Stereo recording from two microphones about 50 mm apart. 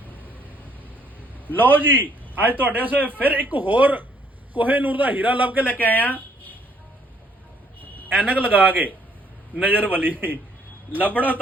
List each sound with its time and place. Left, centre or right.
0.1 s vehicle: right
1.5 s a man's voice: right
5.8 s speech: left
8.2 s a man's voice: right
11.1 s a man's voice: left